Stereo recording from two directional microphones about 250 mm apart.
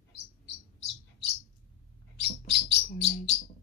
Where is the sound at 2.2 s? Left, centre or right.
Left.